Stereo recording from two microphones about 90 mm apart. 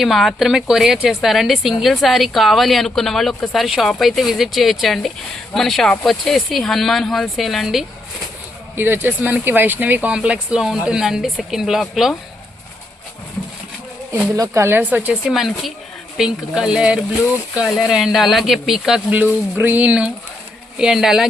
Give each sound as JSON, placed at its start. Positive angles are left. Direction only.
{"t": 0.0, "sound": "a woman's voice", "side_deg": 0}
{"t": 8.7, "sound": "a woman's voice", "side_deg": -25}
{"t": 14.3, "sound": "speech", "side_deg": -35}
{"t": 15.3, "sound": "a woman's voice", "side_deg": 0}
{"t": 19.1, "sound": "a woman's voice", "side_deg": -20}